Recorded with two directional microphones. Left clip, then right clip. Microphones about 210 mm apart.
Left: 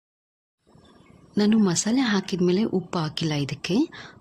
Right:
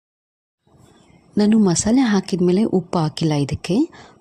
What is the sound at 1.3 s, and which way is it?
A woman's voice, 25° right (ahead or behind).